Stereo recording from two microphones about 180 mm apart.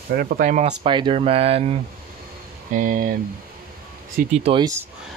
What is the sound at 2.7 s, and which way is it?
Speech, 45° right (ahead or behind).